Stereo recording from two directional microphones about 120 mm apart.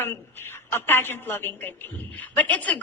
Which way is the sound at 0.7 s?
20° left (ahead or behind).